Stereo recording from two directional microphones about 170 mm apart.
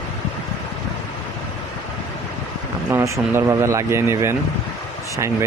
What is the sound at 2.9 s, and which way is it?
Speech, 15° right (ahead or behind).